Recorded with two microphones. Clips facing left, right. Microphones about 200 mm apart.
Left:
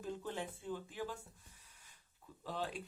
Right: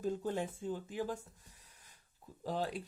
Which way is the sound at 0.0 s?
40° right (ahead or behind).